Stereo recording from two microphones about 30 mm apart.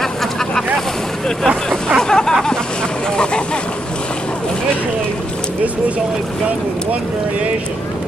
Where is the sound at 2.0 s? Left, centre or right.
Left.